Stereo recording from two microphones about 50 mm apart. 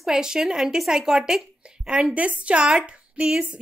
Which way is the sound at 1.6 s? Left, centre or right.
Right.